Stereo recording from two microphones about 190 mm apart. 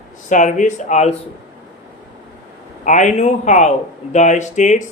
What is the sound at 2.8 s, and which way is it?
Speech, 40° left (ahead or behind).